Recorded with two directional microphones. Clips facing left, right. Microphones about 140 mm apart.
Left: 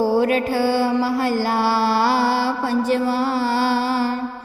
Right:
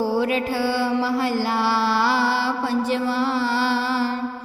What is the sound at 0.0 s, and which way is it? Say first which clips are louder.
Mantra: left 4 dB; 45° left (ahead or behind).